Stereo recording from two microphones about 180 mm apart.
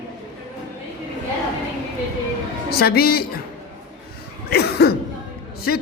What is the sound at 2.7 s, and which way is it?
Speech, 60° left (ahead or behind).